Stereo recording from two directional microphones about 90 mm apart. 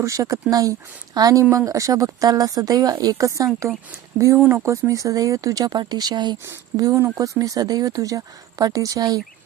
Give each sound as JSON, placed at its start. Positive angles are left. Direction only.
{"t": 0.0, "sound": "speech", "side_deg": -35}
{"t": 6.9, "sound": "speech", "side_deg": -35}